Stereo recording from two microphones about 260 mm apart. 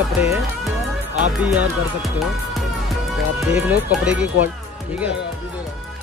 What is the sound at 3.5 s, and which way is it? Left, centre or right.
Speech, centre.